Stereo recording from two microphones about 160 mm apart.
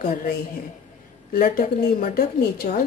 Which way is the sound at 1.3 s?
70° left (ahead or behind).